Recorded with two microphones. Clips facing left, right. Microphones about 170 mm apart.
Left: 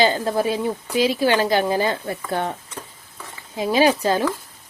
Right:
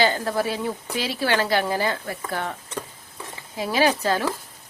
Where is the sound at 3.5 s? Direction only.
20° left (ahead or behind).